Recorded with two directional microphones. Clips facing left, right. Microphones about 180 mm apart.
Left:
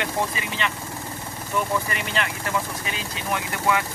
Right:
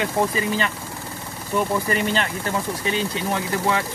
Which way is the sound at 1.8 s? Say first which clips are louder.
Right 5 dB; 35° right (ahead or behind).